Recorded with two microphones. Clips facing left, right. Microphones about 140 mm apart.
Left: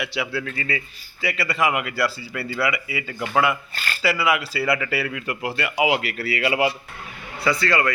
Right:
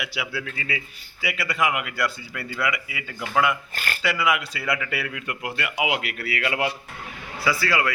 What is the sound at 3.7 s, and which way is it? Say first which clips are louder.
Speech: even; 50° right (ahead or behind).